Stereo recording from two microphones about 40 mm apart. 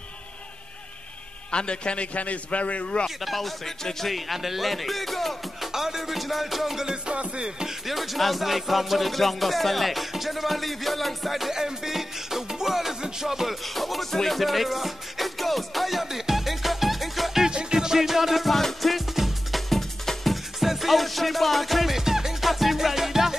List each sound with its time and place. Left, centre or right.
1.5 s a man's voice: left
2.1 s a man's voice: left
3.2 s speech: centre
5.7 s music: centre
7.1 s music: right
7.4 s music: centre
7.8 s music: centre
13.7 s music: centre
17.5 s music: right
19.7 s music: centre
20.5 s music: centre